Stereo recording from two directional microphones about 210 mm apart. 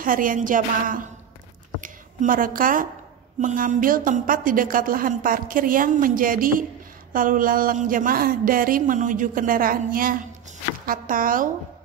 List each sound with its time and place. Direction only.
0.0 s a woman's voice: 40° right (ahead or behind)